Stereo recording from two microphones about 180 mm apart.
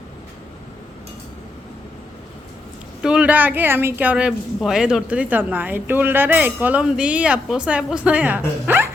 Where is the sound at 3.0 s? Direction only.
5° right (ahead or behind).